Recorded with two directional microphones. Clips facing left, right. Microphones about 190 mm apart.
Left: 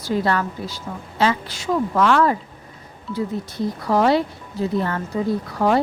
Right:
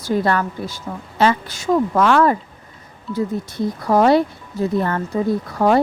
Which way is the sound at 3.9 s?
50° right (ahead or behind).